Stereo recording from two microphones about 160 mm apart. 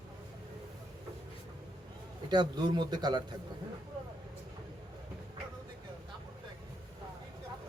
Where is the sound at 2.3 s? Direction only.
25° right (ahead or behind).